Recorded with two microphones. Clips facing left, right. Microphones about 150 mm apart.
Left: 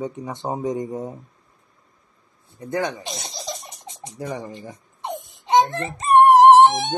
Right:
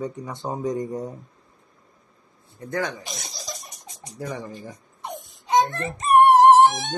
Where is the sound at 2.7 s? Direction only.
20° left (ahead or behind).